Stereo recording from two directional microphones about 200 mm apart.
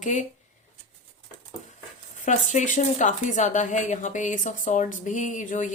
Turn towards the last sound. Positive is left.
turn(degrees=40)  # may be behind; listen again after turning